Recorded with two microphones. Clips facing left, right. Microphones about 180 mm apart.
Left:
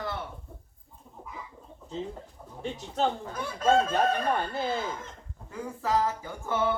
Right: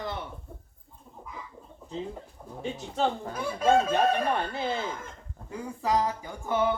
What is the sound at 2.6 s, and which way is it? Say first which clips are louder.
Speech: even; centre (ahead or behind).